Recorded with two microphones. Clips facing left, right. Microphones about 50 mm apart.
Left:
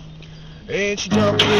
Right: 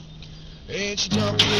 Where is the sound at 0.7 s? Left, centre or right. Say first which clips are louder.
Left 7 dB; left.